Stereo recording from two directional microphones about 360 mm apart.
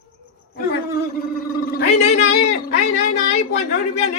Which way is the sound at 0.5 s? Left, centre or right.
Left.